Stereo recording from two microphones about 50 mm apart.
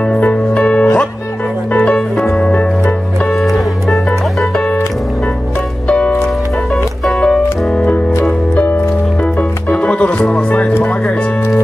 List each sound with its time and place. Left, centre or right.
0.1 s music: left
3.3 s music: centre
5.9 s music: centre
9.8 s music: left